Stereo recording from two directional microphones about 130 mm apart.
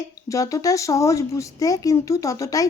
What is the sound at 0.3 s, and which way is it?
A woman's voice, 25° left (ahead or behind).